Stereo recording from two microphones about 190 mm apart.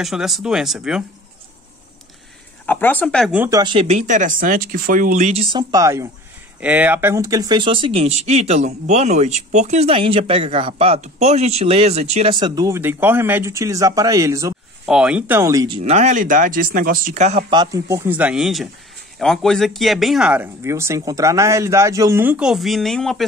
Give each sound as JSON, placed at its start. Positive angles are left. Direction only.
{"t": 0.0, "sound": "speech", "side_deg": 0}
{"t": 2.6, "sound": "speech", "side_deg": 10}
{"t": 3.3, "sound": "speech", "side_deg": -15}
{"t": 3.7, "sound": "speech", "side_deg": -35}
{"t": 14.9, "sound": "speech", "side_deg": -5}
{"t": 15.8, "sound": "speech", "side_deg": -40}
{"t": 17.5, "sound": "speech", "side_deg": -20}